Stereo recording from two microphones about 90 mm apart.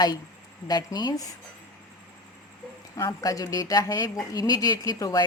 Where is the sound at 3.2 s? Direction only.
40° left (ahead or behind).